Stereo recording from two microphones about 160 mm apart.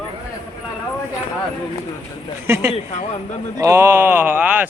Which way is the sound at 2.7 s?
45° left (ahead or behind).